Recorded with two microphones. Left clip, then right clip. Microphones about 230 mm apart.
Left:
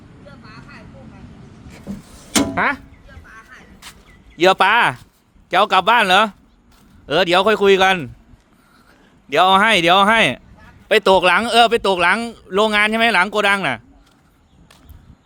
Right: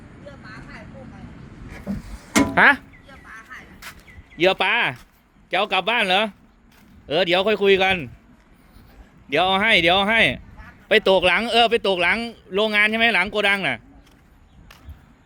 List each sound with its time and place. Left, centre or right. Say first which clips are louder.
3.5 s a sound: right 3 dB; right
4.4 s speech: left 6 dB; left
9.3 s speech: left 5 dB; centre